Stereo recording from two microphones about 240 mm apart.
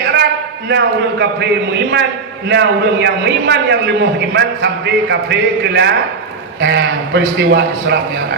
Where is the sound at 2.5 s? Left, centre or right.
Right.